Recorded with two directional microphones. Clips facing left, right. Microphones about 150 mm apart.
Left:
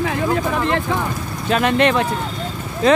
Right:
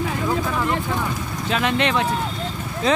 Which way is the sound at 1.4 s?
50° left (ahead or behind).